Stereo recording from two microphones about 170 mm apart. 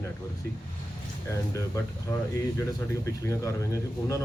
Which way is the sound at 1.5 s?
15° left (ahead or behind).